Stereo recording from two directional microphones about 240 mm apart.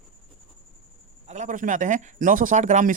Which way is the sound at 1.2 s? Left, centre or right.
Right.